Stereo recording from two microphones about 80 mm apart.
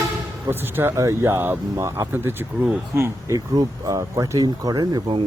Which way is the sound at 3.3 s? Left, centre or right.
Right.